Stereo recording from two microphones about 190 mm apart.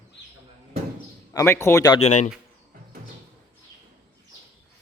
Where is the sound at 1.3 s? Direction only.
15° left (ahead or behind).